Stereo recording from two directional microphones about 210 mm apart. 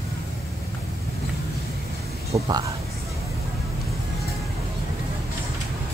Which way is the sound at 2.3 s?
15° right (ahead or behind).